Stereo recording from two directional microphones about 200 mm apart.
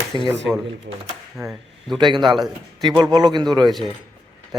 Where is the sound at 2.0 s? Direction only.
25° right (ahead or behind).